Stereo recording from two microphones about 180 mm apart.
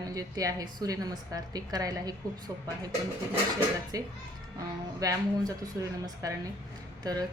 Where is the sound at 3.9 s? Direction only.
20° right (ahead or behind).